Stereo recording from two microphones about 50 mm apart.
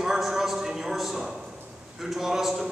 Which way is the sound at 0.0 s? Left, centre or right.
Centre.